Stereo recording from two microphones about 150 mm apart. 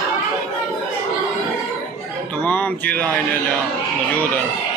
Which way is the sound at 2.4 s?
10° left (ahead or behind).